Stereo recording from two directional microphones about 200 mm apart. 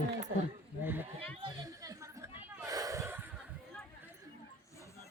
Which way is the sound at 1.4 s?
15° right (ahead or behind).